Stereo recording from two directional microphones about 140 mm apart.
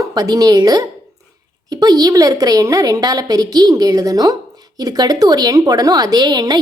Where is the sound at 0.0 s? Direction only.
25° right (ahead or behind).